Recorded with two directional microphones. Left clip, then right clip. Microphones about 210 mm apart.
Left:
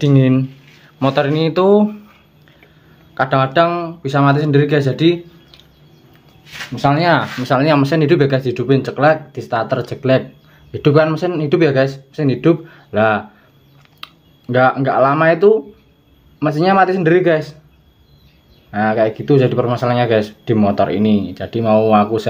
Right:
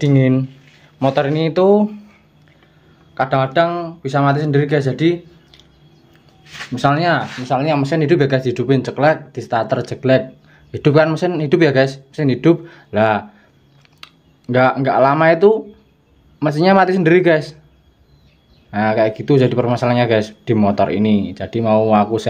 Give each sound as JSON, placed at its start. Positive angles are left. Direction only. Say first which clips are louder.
{"t": 0.0, "sound": "speech", "louder": "left 1 dB", "side_deg": -10}
{"t": 3.2, "sound": "speech", "louder": "left 2 dB", "side_deg": -5}
{"t": 6.7, "sound": "a man's voice", "louder": "even", "side_deg": -20}
{"t": 7.2, "sound": "speech", "louder": "left 3 dB", "side_deg": 15}
{"t": 7.8, "sound": "a man's voice", "louder": "left 2 dB", "side_deg": -5}
{"t": 18.7, "sound": "speech", "louder": "even", "side_deg": -20}